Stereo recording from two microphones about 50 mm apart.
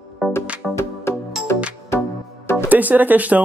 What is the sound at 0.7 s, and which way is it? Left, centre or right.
Music, left.